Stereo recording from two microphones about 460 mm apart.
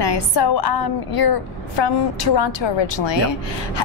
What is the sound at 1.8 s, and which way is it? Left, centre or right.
A woman's voice, left.